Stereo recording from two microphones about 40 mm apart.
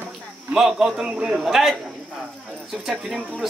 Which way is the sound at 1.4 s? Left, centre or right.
Centre.